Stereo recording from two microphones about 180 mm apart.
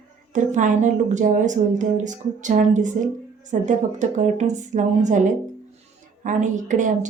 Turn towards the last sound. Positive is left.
turn(degrees=-45)  # may be behind; listen again after turning